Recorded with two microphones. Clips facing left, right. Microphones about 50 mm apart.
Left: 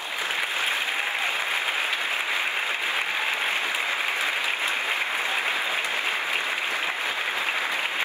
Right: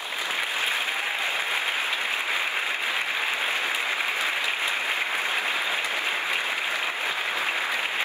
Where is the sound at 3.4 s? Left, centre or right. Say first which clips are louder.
Even; left.